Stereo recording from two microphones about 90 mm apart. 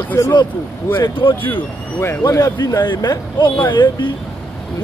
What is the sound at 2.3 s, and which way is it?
A man's voice, 40° left (ahead or behind).